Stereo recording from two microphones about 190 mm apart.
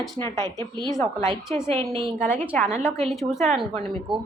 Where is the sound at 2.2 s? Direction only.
5° left (ahead or behind).